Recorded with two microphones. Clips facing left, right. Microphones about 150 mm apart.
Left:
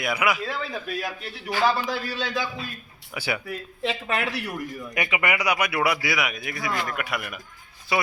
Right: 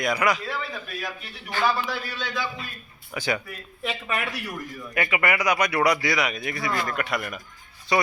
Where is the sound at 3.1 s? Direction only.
10° left (ahead or behind).